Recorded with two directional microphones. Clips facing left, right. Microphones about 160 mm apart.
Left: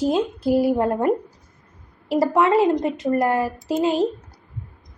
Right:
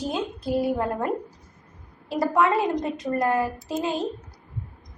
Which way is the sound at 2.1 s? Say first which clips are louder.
Left 4 dB; 25° left (ahead or behind).